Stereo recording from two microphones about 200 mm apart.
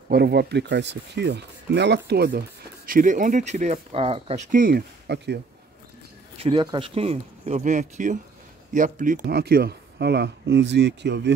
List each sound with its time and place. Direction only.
0.1 s speech: 55° right (ahead or behind)
2.9 s speech: 40° right (ahead or behind); by 5.4 s 55° right (ahead or behind)
6.3 s speech: 25° right (ahead or behind)
9.2 s speech: 50° right (ahead or behind)